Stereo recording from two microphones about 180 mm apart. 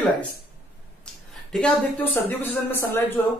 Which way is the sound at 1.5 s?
10° left (ahead or behind).